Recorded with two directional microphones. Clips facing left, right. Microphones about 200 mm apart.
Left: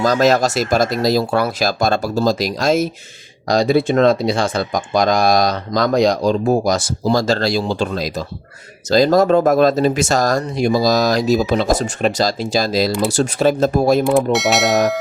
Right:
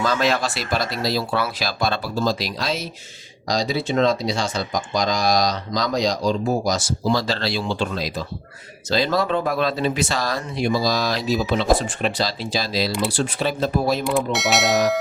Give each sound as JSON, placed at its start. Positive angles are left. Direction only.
{"t": 0.0, "sound": "speech", "side_deg": 40}
{"t": 14.0, "sound": "speech", "side_deg": 0}